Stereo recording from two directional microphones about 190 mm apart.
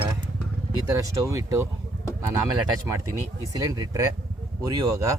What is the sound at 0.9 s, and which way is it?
Speech, 15° right (ahead or behind).